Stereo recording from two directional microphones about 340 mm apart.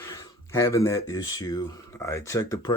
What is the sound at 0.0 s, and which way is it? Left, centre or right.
Speech, centre.